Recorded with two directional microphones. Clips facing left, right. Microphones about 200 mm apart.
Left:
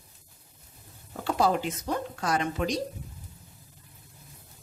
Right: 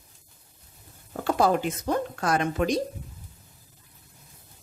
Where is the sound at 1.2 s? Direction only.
50° right (ahead or behind).